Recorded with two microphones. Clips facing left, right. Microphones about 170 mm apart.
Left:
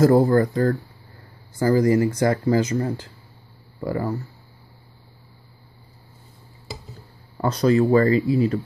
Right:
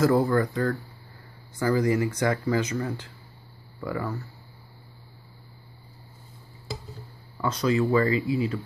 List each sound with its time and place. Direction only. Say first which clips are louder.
0.0 s speech: left 6 dB; 35° left (ahead or behind)
7.3 s speech: left 6 dB; 40° left (ahead or behind)